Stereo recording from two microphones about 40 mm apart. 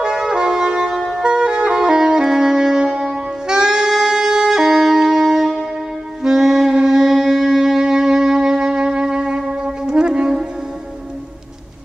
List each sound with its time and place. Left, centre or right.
0.0 s brass instrument: centre
1.1 s saxophone: centre
3.9 s music: centre
5.1 s wind instrument: centre
6.2 s saxophone: centre